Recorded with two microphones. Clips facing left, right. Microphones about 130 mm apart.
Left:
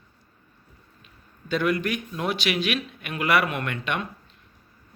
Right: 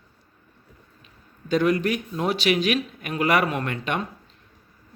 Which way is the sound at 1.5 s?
40° right (ahead or behind).